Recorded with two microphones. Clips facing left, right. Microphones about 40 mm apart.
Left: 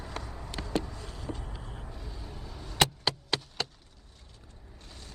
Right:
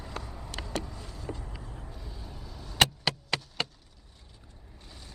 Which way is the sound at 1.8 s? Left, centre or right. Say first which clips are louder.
Left 1 dB; centre.